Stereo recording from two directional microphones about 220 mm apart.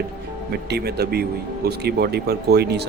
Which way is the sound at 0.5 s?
45° right (ahead or behind).